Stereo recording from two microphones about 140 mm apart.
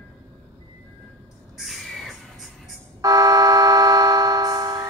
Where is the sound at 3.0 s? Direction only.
25° right (ahead or behind).